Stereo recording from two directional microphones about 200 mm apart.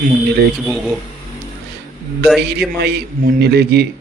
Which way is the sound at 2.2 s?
Centre (ahead or behind).